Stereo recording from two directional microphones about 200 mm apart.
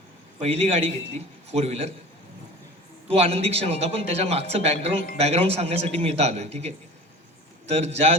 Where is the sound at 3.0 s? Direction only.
30° right (ahead or behind).